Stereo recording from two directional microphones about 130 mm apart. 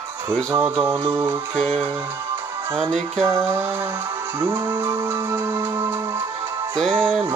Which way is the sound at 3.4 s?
15° right (ahead or behind).